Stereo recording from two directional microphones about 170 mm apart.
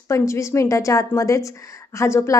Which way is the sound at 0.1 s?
15° left (ahead or behind).